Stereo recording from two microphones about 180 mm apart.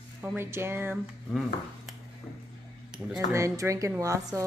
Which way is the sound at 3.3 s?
15° right (ahead or behind).